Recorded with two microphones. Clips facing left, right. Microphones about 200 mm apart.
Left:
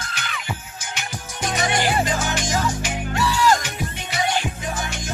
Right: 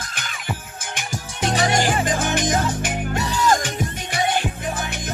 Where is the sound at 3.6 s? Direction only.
50° right (ahead or behind).